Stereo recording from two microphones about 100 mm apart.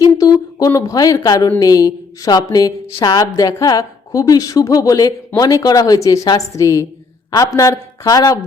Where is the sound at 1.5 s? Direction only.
35° left (ahead or behind).